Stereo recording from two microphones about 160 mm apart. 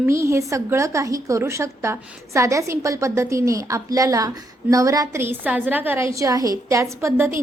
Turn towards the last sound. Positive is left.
turn(degrees=-15)  # may be behind; listen again after turning